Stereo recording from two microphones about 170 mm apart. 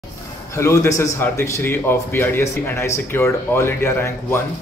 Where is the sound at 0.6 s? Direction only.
15° left (ahead or behind).